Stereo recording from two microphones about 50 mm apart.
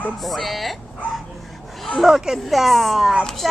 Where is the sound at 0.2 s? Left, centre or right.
Centre.